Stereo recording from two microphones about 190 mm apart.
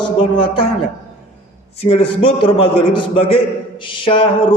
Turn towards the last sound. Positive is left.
turn(degrees=30)  # may be behind; listen again after turning